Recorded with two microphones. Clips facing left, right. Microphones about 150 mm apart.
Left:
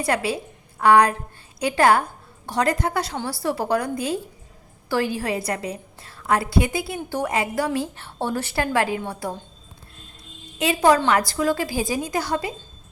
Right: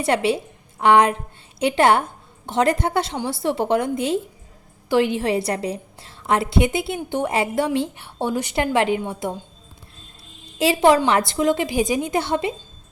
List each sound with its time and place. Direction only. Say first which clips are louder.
0.0 s a woman's voice: right 4 dB; 25° right (ahead or behind)
7.9 s a woman's voice: right 2 dB; 15° right (ahead or behind)
10.6 s a woman's voice: right 2 dB; 25° right (ahead or behind)